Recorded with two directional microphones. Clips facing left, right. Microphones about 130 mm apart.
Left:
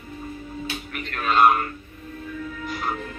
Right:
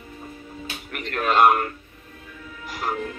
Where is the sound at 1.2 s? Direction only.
55° right (ahead or behind).